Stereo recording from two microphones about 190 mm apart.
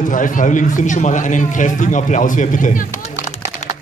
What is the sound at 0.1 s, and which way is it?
A man's voice, 45° left (ahead or behind).